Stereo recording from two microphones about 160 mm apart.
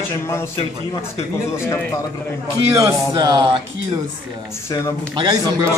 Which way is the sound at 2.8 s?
25° right (ahead or behind).